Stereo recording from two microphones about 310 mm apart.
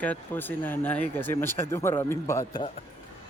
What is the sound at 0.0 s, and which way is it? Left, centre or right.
Speech, centre.